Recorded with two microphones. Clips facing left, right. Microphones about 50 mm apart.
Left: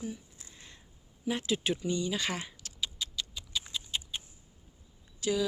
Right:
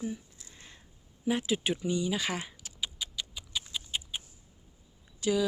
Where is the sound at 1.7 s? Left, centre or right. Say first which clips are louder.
Right 2 dB; centre.